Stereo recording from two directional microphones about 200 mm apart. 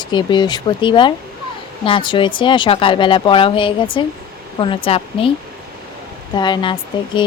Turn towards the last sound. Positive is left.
turn(degrees=20)  # may be behind; listen again after turning